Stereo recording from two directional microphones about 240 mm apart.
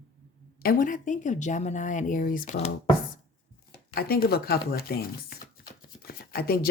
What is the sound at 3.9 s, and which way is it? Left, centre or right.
Speech, left.